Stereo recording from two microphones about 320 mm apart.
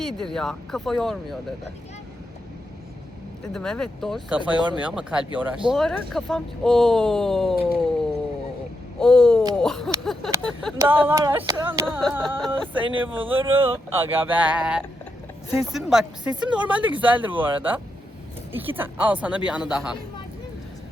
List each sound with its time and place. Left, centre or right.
0.0 s speech: centre
3.5 s speech: centre
9.0 s speech: centre
10.8 s a sound: centre
15.4 s speech: centre